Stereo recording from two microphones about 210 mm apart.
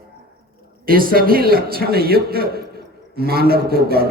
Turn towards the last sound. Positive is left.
turn(degrees=-45)  # may be behind; listen again after turning